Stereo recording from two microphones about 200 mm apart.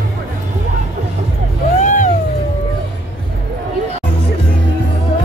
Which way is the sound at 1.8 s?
40° left (ahead or behind).